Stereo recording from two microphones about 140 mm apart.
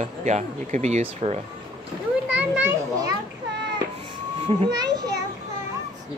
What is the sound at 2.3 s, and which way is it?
Children playing, 10° right (ahead or behind).